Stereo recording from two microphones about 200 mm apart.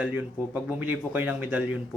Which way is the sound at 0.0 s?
10° right (ahead or behind).